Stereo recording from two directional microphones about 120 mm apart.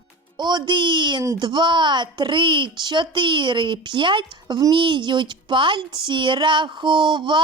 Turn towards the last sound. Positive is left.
turn(degrees=-40)  # may be behind; listen again after turning